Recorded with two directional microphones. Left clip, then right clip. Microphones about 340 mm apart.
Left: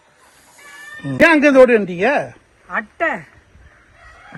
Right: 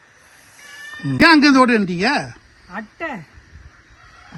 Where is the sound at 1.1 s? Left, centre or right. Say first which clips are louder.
Left 1 dB; centre.